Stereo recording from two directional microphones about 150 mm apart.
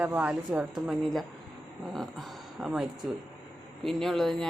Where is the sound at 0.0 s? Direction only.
10° right (ahead or behind).